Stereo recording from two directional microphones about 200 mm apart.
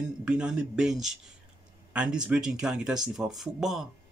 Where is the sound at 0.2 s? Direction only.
5° right (ahead or behind).